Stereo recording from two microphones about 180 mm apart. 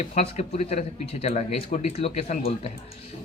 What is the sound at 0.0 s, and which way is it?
Speech, 40° left (ahead or behind).